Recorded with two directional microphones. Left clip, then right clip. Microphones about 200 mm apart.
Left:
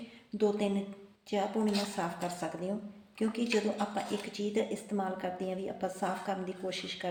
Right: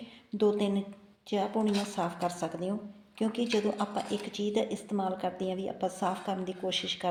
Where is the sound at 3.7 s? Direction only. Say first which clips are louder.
Right 2 dB; 35° right (ahead or behind).